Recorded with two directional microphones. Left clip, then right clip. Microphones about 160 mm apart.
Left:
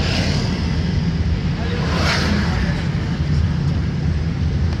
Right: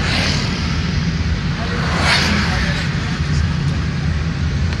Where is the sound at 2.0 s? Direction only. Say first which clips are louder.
Right 6 dB; 50° left (ahead or behind).